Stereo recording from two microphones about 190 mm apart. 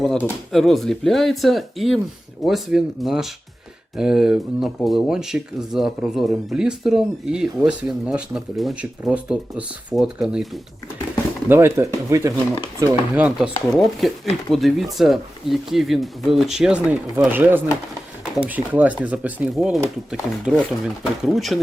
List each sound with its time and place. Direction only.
0.0 s speech: 5° left (ahead or behind)